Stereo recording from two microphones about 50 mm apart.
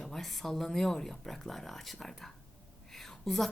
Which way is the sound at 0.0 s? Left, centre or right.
Centre.